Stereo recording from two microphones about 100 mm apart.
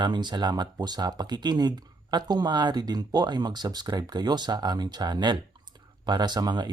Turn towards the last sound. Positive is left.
turn(degrees=-45)  # may be behind; listen again after turning